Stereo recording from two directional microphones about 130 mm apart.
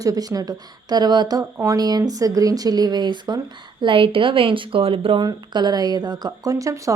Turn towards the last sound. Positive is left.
turn(degrees=-25)  # may be behind; listen again after turning